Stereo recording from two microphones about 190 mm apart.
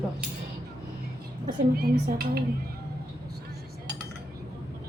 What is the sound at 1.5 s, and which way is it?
Speech, 50° right (ahead or behind).